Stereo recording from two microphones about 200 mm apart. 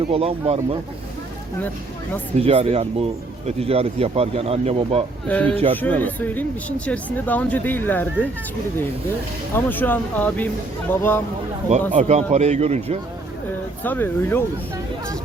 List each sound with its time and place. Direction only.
0.1 s speech: 30° right (ahead or behind)
2.4 s speech: 30° right (ahead or behind)
5.3 s speech: 5° left (ahead or behind)
9.6 s speech: 10° left (ahead or behind)
11.7 s a man's voice: 35° right (ahead or behind)
13.8 s speech: 10° left (ahead or behind)